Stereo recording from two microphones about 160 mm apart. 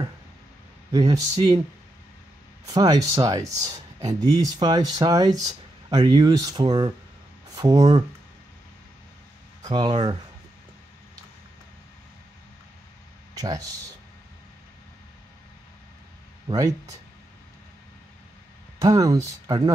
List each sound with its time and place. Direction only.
0.9 s speech: 25° right (ahead or behind)
2.7 s speech: 20° right (ahead or behind)
9.6 s speech: 25° right (ahead or behind)
13.3 s speech: 25° right (ahead or behind)
16.4 s speech: 25° right (ahead or behind)
18.8 s speech: 25° right (ahead or behind)